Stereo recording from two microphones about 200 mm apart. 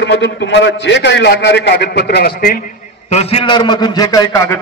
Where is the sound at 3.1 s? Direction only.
30° left (ahead or behind).